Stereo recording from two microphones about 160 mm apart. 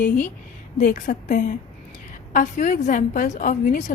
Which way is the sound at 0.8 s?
60° left (ahead or behind).